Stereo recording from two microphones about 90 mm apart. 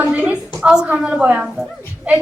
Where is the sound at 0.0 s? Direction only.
15° right (ahead or behind).